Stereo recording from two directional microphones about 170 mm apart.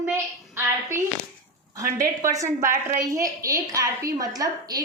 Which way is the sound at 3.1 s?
20° right (ahead or behind).